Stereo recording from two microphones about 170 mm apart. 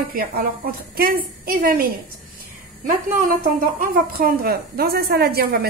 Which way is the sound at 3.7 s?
55° right (ahead or behind).